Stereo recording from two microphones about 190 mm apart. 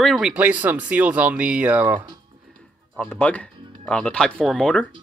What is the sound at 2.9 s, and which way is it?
Speech, 5° left (ahead or behind).